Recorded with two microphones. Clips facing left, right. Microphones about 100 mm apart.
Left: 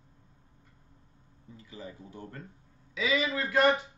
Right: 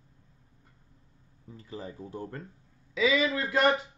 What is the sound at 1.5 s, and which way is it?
Speech, 40° right (ahead or behind).